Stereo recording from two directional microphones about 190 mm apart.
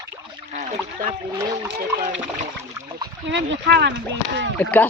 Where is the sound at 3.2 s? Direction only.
70° right (ahead or behind).